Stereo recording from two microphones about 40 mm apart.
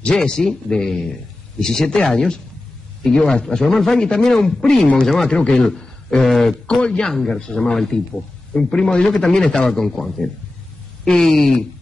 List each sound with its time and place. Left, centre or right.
0.0 s a man's voice: centre
6.7 s speech: centre
7.1 s speech: centre
7.3 s speech: left
7.7 s speech: centre